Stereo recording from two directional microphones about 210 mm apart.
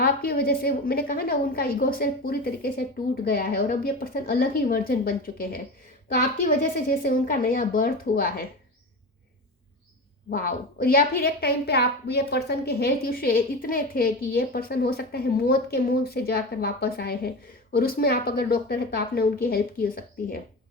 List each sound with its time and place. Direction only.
0.0 s a woman's voice: 45° left (ahead or behind)
7.0 s a woman's voice: 45° left (ahead or behind)
10.2 s a woman's voice: 45° left (ahead or behind)